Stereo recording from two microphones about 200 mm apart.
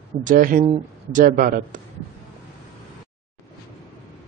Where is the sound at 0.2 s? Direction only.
40° right (ahead or behind).